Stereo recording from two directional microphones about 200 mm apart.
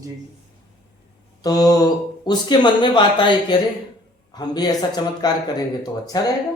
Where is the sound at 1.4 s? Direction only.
20° left (ahead or behind).